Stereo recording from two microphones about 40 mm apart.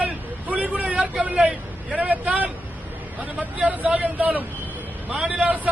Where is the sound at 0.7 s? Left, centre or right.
Right.